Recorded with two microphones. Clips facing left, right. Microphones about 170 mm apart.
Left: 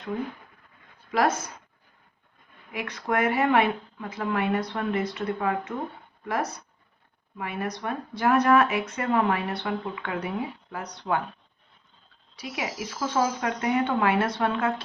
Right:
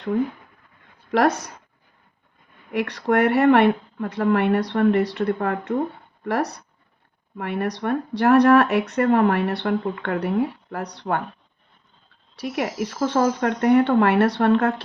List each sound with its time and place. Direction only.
1.1 s speech: 70° right (ahead or behind)
2.7 s speech: 65° right (ahead or behind)
12.4 s speech: 60° right (ahead or behind)